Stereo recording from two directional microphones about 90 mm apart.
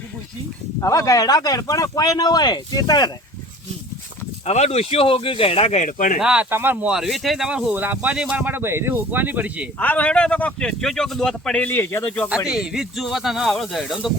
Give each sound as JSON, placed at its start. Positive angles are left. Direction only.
{"t": 0.8, "sound": "speech", "side_deg": 35}
{"t": 4.9, "sound": "speech", "side_deg": 90}
{"t": 6.1, "sound": "speech", "side_deg": -10}
{"t": 6.5, "sound": "speech", "side_deg": -25}
{"t": 6.8, "sound": "speech", "side_deg": -5}
{"t": 9.7, "sound": "speech", "side_deg": 15}
{"t": 11.6, "sound": "speech", "side_deg": 25}
{"t": 12.0, "sound": "speech", "side_deg": 15}
{"t": 12.5, "sound": "speech", "side_deg": -10}